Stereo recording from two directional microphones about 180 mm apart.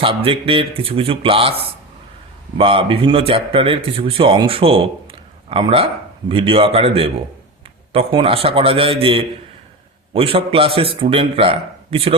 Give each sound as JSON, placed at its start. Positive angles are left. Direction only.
{"t": 0.0, "sound": "a man's voice", "side_deg": -30}